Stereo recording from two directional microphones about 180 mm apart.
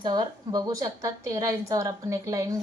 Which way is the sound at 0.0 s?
25° right (ahead or behind).